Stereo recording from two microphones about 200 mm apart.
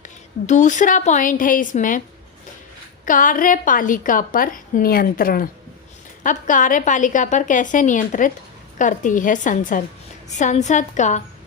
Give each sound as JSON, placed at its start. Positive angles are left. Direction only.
{"t": 0.0, "sound": "a woman's voice", "side_deg": 35}
{"t": 3.1, "sound": "a woman's voice", "side_deg": 40}